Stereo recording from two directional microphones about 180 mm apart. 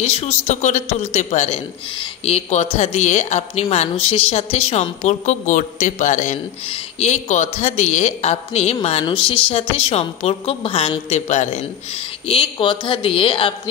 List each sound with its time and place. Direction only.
0.0 s a woman's voice: 35° left (ahead or behind)
12.3 s a woman's voice: 30° left (ahead or behind)